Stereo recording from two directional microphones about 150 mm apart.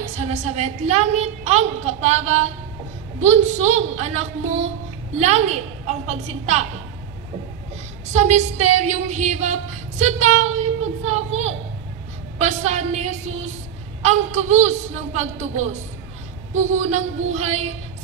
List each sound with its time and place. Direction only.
0.1 s a woman's voice: 50° right (ahead or behind)
8.1 s a woman's voice: 50° right (ahead or behind)